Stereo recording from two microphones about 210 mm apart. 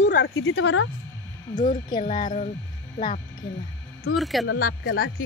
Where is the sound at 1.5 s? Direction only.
40° left (ahead or behind).